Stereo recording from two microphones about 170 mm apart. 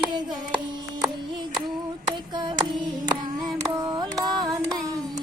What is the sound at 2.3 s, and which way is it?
Child singing, 25° right (ahead or behind).